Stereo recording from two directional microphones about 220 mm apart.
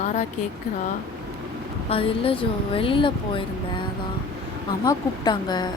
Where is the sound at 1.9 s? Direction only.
25° left (ahead or behind).